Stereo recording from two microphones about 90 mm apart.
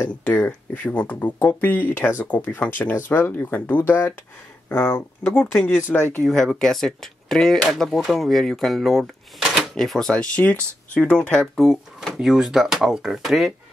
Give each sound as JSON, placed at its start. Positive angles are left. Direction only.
{"t": 0.0, "sound": "speech", "side_deg": 20}